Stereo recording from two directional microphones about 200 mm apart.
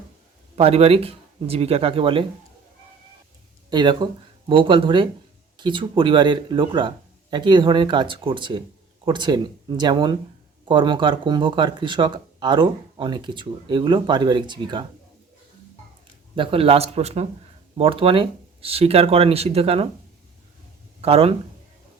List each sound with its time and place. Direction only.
0.5 s speech: 30° right (ahead or behind)
3.7 s speech: 20° right (ahead or behind)
16.3 s speech: 25° right (ahead or behind)
21.0 s speech: 30° right (ahead or behind)